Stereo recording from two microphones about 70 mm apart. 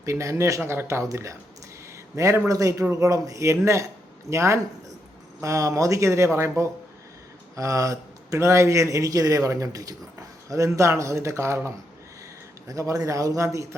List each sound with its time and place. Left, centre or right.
0.0 s speech: right
0.6 s speech: right
7.5 s speech: right
12.6 s speech: right